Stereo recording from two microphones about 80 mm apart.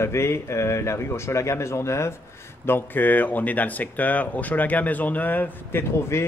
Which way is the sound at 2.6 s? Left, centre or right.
Left.